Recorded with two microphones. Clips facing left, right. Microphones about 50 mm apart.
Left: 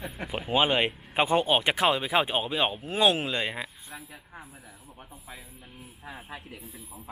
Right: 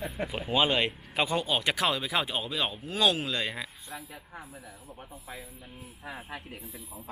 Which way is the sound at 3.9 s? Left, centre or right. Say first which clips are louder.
Right 2 dB; centre.